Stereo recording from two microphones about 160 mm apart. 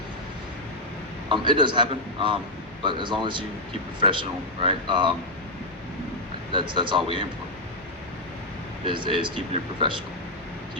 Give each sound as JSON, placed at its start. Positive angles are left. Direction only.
{"t": 1.3, "sound": "speech", "side_deg": -30}
{"t": 6.5, "sound": "speech", "side_deg": -30}
{"t": 8.9, "sound": "speech", "side_deg": -30}